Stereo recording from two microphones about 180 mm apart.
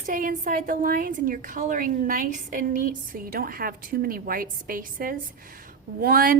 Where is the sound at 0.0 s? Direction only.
50° right (ahead or behind).